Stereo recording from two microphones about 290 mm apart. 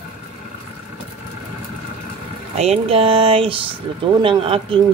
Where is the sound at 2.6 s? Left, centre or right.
Right.